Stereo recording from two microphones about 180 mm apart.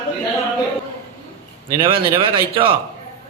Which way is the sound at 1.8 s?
30° right (ahead or behind).